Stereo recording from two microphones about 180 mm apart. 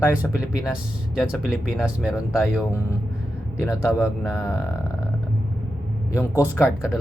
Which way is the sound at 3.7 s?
15° left (ahead or behind).